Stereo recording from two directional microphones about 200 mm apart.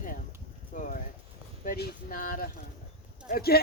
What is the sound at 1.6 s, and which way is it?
Speech, 45° left (ahead or behind).